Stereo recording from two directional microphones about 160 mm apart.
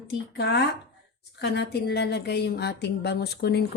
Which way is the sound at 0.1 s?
90° left.